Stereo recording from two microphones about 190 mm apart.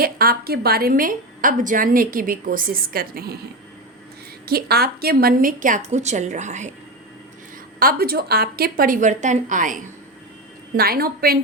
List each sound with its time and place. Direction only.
0.0 s a woman's voice: 50° right (ahead or behind)
4.4 s a woman's voice: 55° right (ahead or behind); by 6.7 s 40° right (ahead or behind)
7.8 s a woman's voice: 50° right (ahead or behind)
10.8 s a woman's voice: 50° right (ahead or behind)